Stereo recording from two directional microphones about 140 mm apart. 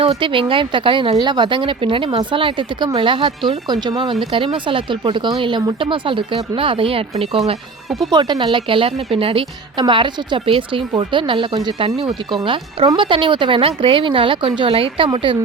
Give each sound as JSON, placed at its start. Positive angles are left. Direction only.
{"t": 0.0, "sound": "speech", "side_deg": -40}
{"t": 7.9, "sound": "speech", "side_deg": 0}
{"t": 8.1, "sound": "speech", "side_deg": -30}